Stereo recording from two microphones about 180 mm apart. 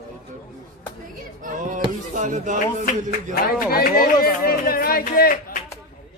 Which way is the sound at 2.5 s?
50° left (ahead or behind).